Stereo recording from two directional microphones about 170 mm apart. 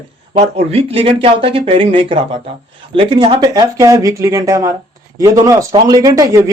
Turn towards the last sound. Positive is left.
turn(degrees=-20)  # may be behind; listen again after turning